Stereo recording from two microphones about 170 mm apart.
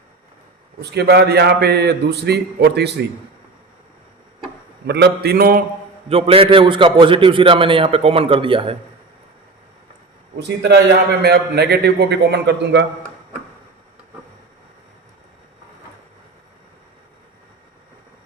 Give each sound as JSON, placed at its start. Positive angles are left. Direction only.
{"t": 0.8, "sound": "a man's voice", "side_deg": -75}
{"t": 4.9, "sound": "a man's voice", "side_deg": -75}
{"t": 6.1, "sound": "a man's voice", "side_deg": -35}
{"t": 10.3, "sound": "a man's voice", "side_deg": -85}
{"t": 11.2, "sound": "a man's voice", "side_deg": -75}